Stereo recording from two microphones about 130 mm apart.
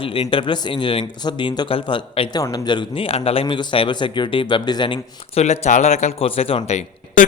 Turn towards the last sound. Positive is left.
turn(degrees=60)  # may be behind; listen again after turning